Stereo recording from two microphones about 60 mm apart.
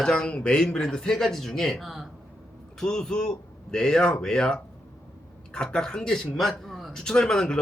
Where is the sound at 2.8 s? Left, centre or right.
Centre.